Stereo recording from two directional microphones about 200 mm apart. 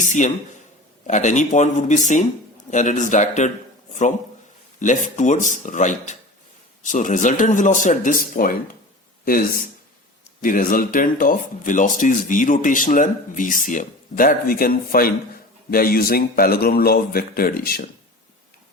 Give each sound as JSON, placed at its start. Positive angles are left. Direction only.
{"t": 0.0, "sound": "a sound", "side_deg": 40}
{"t": 1.0, "sound": "speech", "side_deg": 35}
{"t": 4.8, "sound": "speech", "side_deg": 40}